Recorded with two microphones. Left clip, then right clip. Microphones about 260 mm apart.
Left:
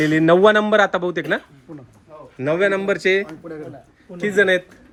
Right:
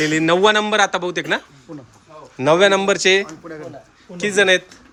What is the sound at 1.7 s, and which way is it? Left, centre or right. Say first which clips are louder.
Speech: right 3 dB; right.